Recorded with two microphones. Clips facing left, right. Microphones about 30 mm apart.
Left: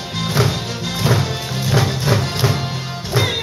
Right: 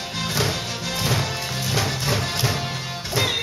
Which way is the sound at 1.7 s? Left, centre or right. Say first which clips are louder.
Left 6 dB; left.